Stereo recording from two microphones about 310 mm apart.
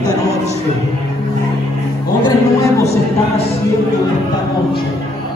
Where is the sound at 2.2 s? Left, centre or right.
Centre.